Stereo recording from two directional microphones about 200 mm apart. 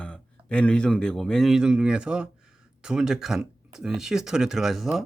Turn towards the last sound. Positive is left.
turn(degrees=0)  # may be behind; listen again after turning